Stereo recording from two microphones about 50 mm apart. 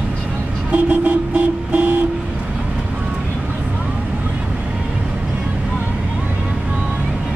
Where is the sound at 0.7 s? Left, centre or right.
Right.